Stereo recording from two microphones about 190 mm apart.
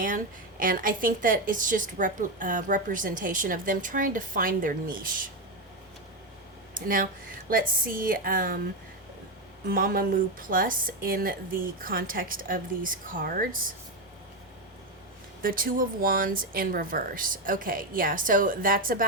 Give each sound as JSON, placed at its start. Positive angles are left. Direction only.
{"t": 0.6, "sound": "a woman's voice", "side_deg": -45}
{"t": 6.7, "sound": "a woman's voice", "side_deg": -45}
{"t": 9.6, "sound": "a woman's voice", "side_deg": -50}
{"t": 15.4, "sound": "a woman's voice", "side_deg": -50}